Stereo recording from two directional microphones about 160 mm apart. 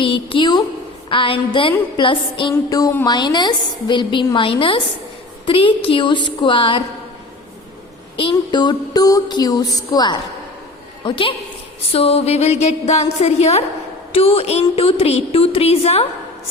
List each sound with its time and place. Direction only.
0.0 s a woman's voice: 35° left (ahead or behind)
8.1 s a woman's voice: 35° left (ahead or behind)